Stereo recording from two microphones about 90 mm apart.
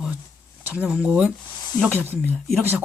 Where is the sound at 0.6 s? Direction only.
15° right (ahead or behind).